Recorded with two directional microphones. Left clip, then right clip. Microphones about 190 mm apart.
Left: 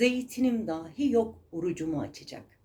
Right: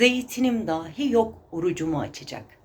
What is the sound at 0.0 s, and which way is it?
Speech, 15° left (ahead or behind).